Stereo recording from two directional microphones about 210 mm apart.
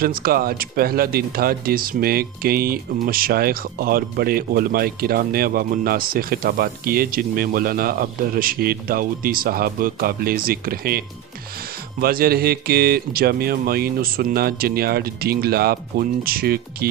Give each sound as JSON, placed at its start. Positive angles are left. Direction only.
{"t": 0.0, "sound": "speech", "side_deg": -45}